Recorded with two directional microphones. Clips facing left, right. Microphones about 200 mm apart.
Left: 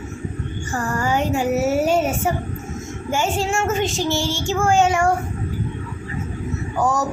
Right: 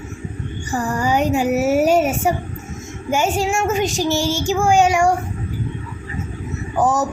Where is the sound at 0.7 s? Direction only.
15° right (ahead or behind).